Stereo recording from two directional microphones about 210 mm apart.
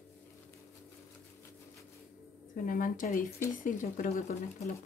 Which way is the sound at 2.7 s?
40° left (ahead or behind).